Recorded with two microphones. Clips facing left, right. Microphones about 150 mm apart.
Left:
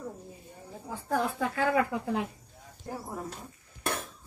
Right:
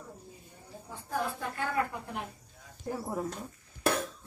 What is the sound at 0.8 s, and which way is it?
Speech, 90° left.